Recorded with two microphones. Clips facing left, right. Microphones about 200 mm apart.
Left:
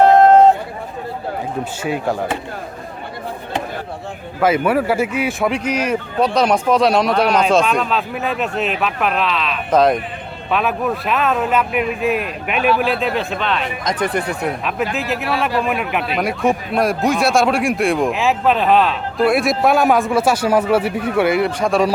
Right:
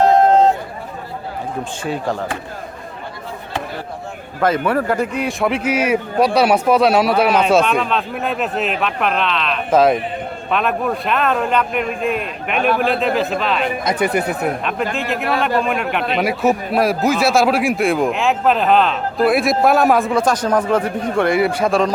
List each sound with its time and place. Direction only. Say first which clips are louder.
0.1 s a sound: left 3 dB; 60° left (ahead or behind)
1.8 s speech: left 1 dB; 5° left (ahead or behind)
4.4 s a man's voice: left 1 dB; 10° left (ahead or behind)
12.5 s speech: even; 50° right (ahead or behind)
13.0 s a man's voice: right 2 dB; centre (ahead or behind)